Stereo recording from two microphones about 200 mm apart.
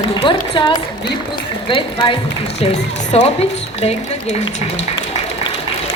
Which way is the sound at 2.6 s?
30° left (ahead or behind).